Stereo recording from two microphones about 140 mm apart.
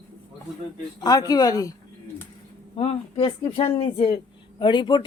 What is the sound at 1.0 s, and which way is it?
Speech, 30° left (ahead or behind).